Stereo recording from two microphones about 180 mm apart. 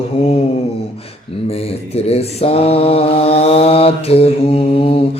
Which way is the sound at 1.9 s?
35° left (ahead or behind).